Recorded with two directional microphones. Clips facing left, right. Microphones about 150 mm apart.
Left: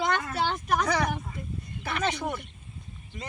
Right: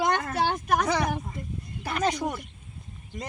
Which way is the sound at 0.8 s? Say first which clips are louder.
Right 1 dB; 25° right (ahead or behind).